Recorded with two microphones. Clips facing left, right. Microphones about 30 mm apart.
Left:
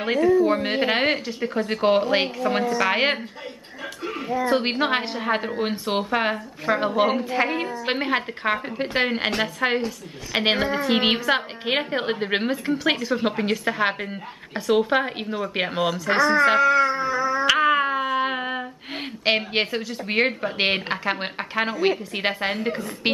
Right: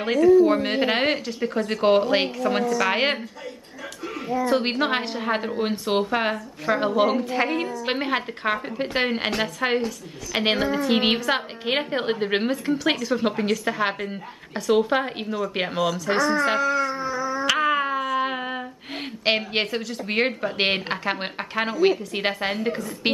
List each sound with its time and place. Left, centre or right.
0.4 s speech: centre
2.3 s a woman's voice: centre
2.9 s speech: centre
4.5 s a woman's voice: centre
15.2 s speech: left
15.7 s speech: left
16.5 s cat: left
17.5 s a sound: centre
18.2 s a woman's voice: centre